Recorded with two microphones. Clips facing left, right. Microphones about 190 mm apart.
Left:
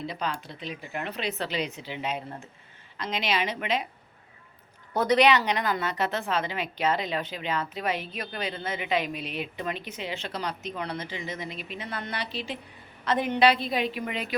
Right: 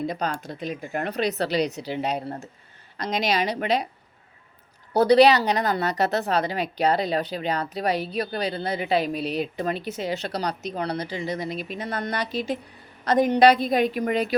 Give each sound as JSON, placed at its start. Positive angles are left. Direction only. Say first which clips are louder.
{"t": 0.0, "sound": "a woman's voice", "louder": "right 5 dB", "side_deg": -45}
{"t": 4.9, "sound": "a woman's voice", "louder": "right 6 dB", "side_deg": -35}